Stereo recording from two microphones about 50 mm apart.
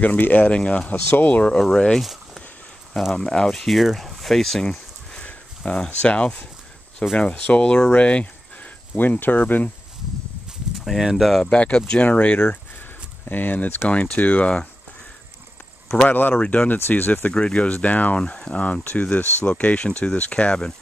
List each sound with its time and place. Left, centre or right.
0.0 s speech: left
0.4 s speech: left
2.0 s a sound: centre
3.0 s speech: centre
4.6 s a sound: centre
6.0 s speech: left
11.1 s speech: centre
11.4 s speech: left
12.4 s a sound: left
13.8 s speech: left
16.1 s speech: left
17.3 s speech: centre
17.6 s speech: left